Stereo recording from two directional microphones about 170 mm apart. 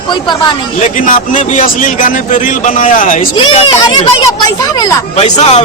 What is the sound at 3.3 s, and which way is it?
Speech, 35° left (ahead or behind).